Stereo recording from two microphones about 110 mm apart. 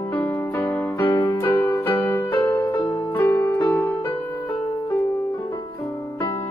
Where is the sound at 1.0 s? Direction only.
35° left (ahead or behind).